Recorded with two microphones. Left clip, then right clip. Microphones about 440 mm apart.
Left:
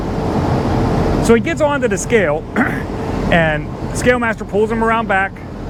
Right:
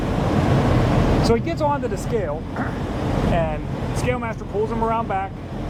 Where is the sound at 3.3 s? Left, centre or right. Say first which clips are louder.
Left 8 dB; left.